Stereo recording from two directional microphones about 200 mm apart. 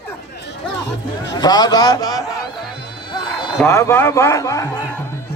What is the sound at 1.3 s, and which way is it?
Speech, 20° left (ahead or behind).